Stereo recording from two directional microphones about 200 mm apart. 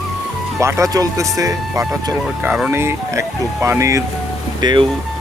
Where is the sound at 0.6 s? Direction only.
15° right (ahead or behind).